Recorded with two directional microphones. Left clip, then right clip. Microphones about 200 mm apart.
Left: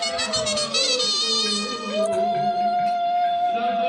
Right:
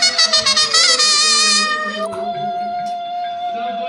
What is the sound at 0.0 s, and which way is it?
Music, 45° right (ahead or behind).